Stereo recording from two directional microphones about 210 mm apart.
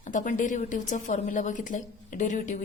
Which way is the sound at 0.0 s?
35° left (ahead or behind).